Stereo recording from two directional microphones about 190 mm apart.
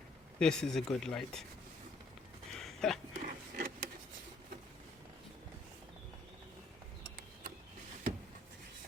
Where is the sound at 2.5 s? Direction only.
Centre (ahead or behind).